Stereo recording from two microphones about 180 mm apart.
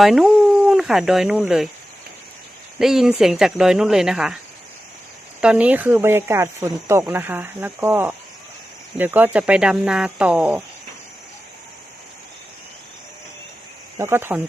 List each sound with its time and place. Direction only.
0.0 s speech: centre (ahead or behind)
2.7 s speech: centre (ahead or behind)
5.4 s speech: 5° right (ahead or behind)
14.0 s speech: 15° right (ahead or behind)